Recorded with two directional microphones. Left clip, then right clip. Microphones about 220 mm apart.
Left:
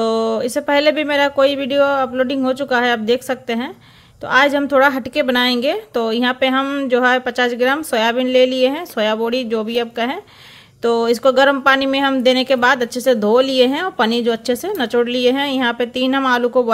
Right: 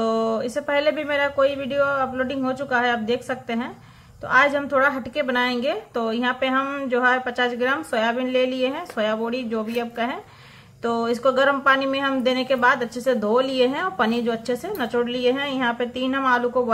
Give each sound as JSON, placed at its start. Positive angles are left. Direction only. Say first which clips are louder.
{"t": 0.0, "sound": "speech", "louder": "left 5 dB", "side_deg": 35}